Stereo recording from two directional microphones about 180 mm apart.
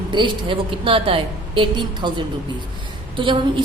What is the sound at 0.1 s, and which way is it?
A woman's voice, 25° right (ahead or behind).